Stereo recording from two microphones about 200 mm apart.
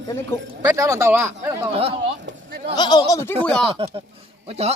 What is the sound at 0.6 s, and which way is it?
Speech, 15° right (ahead or behind).